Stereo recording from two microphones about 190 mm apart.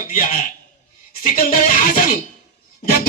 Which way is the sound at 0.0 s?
50° left (ahead or behind).